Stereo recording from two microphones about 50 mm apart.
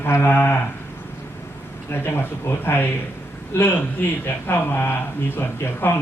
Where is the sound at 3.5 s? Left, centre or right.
Left.